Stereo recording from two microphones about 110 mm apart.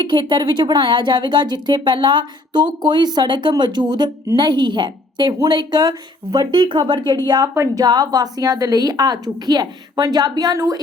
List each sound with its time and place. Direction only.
0.0 s a woman's voice: 45° right (ahead or behind)